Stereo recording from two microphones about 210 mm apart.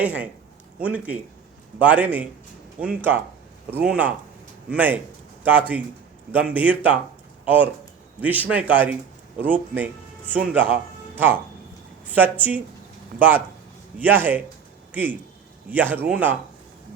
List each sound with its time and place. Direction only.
0.0 s speech: 5° right (ahead or behind)
12.0 s speech: 10° right (ahead or behind)
15.7 s speech: 10° right (ahead or behind)